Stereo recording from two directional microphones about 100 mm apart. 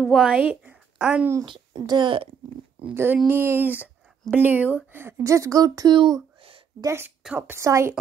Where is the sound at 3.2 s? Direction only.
25° right (ahead or behind).